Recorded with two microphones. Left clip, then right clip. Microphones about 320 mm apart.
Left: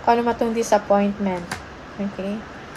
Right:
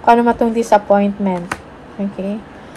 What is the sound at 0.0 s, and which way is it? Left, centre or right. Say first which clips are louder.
Speech: right 7 dB; right.